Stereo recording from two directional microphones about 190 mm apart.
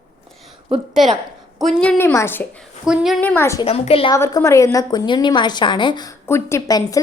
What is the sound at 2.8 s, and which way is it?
Speech, 5° right (ahead or behind).